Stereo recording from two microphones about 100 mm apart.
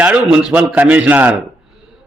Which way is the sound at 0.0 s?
15° right (ahead or behind).